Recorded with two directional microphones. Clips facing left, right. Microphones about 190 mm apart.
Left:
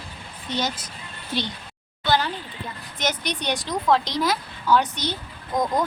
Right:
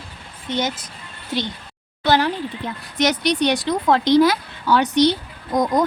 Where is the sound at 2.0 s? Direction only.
75° right (ahead or behind).